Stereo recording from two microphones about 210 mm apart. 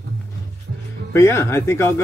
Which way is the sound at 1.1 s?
15° left (ahead or behind).